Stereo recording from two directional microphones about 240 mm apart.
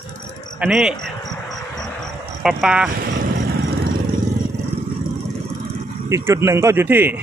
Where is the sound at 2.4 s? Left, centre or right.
Centre.